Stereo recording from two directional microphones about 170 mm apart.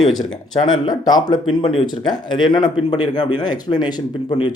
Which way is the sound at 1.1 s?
25° left (ahead or behind).